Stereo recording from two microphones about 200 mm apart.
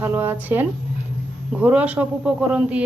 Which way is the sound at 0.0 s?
10° right (ahead or behind).